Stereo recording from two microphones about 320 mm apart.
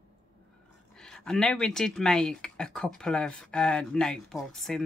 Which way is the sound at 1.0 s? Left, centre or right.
Centre.